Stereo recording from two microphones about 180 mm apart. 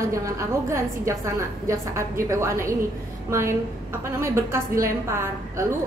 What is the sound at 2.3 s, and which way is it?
A woman's voice, 15° right (ahead or behind).